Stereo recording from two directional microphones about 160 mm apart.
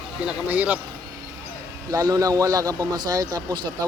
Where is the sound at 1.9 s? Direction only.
20° right (ahead or behind).